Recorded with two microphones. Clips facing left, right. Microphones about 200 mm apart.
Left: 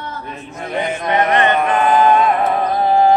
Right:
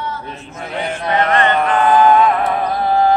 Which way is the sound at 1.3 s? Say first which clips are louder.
Right 1 dB; 20° left (ahead or behind).